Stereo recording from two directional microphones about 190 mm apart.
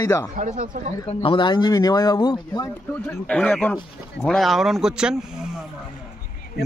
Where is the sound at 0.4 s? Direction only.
45° right (ahead or behind).